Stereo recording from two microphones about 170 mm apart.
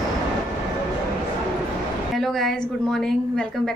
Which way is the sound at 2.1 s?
Centre (ahead or behind).